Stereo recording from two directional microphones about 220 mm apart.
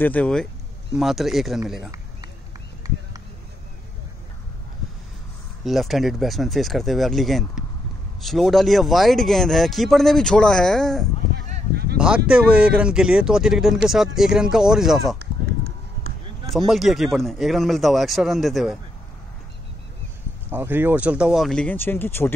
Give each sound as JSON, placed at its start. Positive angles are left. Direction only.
{"t": 0.0, "sound": "speech", "side_deg": 5}
{"t": 2.8, "sound": "a sound", "side_deg": -15}
{"t": 5.6, "sound": "speech", "side_deg": 0}
{"t": 11.7, "sound": "speech", "side_deg": -45}
{"t": 12.3, "sound": "speech", "side_deg": -5}
{"t": 16.5, "sound": "speech", "side_deg": 0}
{"t": 20.4, "sound": "speech", "side_deg": -10}